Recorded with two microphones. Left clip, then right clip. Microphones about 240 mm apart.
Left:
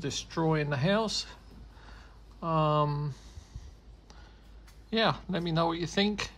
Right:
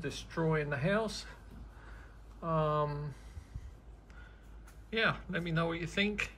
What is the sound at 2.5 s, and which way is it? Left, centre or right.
Speech, left.